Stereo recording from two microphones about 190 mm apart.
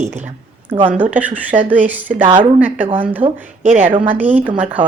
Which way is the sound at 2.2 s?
25° right (ahead or behind).